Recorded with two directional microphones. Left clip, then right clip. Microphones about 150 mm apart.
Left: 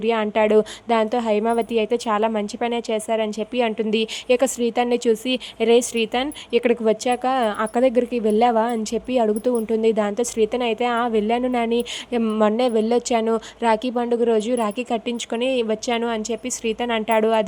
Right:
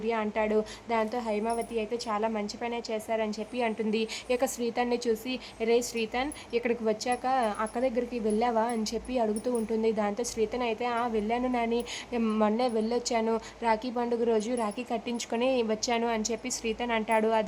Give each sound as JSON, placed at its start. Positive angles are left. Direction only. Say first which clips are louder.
{"t": 0.0, "sound": "speech", "louder": "left 10 dB", "side_deg": 45}